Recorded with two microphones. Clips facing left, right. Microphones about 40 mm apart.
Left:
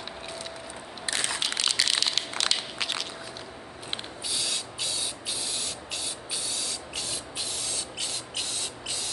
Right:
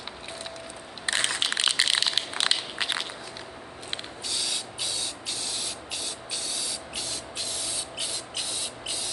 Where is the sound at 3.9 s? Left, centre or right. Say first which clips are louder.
Even; centre.